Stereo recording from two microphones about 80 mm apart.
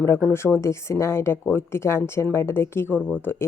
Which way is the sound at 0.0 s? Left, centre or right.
Left.